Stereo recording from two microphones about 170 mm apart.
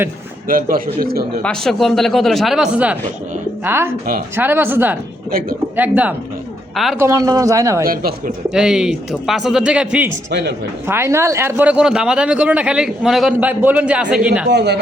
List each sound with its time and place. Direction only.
0.4 s a man's voice: 55° right (ahead or behind)
1.4 s a man's voice: 5° left (ahead or behind); by 7.9 s 15° right (ahead or behind)
8.4 s a man's voice: 5° right (ahead or behind)
14.5 s speech: 75° right (ahead or behind)